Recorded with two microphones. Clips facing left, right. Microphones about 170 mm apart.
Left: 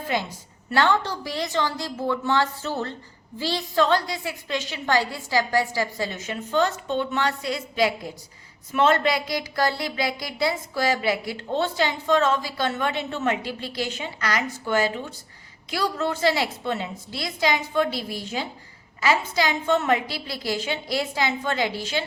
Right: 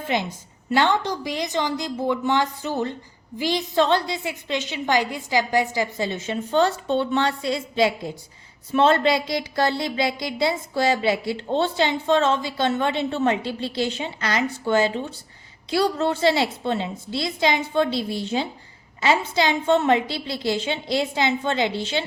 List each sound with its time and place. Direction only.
0.1 s a woman's voice: 20° right (ahead or behind)